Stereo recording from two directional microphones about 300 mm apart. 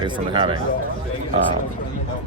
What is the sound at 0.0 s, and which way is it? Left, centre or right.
Speech, centre.